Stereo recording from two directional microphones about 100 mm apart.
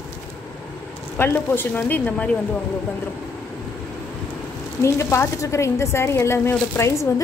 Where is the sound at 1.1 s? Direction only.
20° left (ahead or behind).